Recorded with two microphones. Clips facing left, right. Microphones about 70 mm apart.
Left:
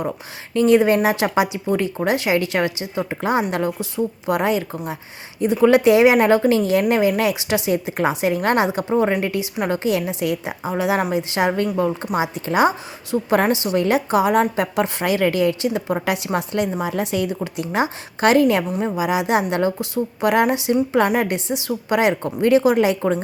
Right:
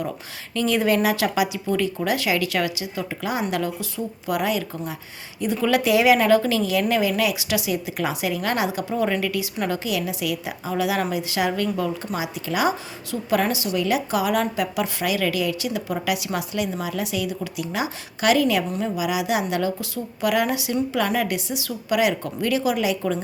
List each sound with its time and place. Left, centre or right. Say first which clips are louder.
0.5 s a woman's voice: left 6 dB; left